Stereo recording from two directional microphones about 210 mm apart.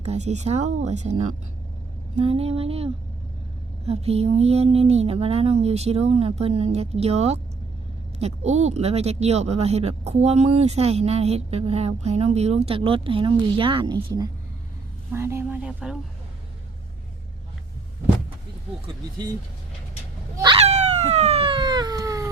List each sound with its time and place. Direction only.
0.0 s speech: 30° right (ahead or behind); by 16.0 s 5° right (ahead or behind)
20.3 s cat: 20° right (ahead or behind)